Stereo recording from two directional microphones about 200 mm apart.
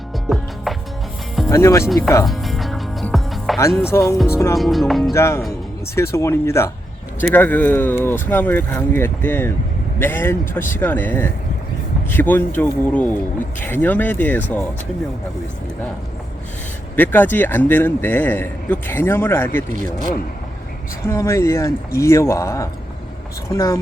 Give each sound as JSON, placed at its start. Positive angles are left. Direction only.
{"t": 0.3, "sound": "music", "side_deg": 0}
{"t": 1.5, "sound": "a man's voice", "side_deg": 15}
{"t": 2.2, "sound": "music", "side_deg": 0}
{"t": 3.8, "sound": "a man's voice", "side_deg": 10}
{"t": 4.5, "sound": "speech", "side_deg": 0}
{"t": 5.1, "sound": "a man's voice", "side_deg": 15}
{"t": 16.9, "sound": "a man's voice", "side_deg": 10}
{"t": 21.1, "sound": "a man's voice", "side_deg": 15}